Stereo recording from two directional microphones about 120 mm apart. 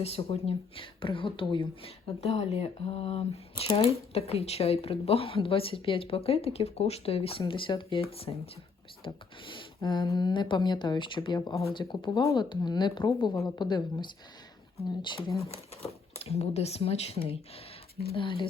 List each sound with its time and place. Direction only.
0.0 s speech: 55° left (ahead or behind)
9.0 s speech: 45° left (ahead or behind)
15.4 s speech: 60° left (ahead or behind)
18.1 s speech: 45° left (ahead or behind)